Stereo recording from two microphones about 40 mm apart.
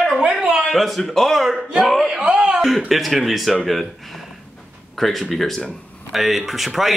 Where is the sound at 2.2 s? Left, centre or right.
Right.